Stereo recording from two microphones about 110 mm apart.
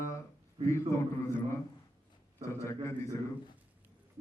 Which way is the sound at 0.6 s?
25° left (ahead or behind).